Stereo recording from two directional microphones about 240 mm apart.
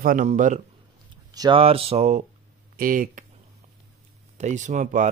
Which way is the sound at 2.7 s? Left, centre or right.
Right.